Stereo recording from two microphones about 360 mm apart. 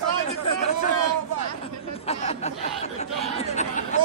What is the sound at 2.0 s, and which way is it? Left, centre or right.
Speech, centre.